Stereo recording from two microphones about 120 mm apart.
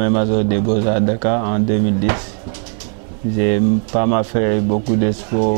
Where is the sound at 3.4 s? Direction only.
15° right (ahead or behind).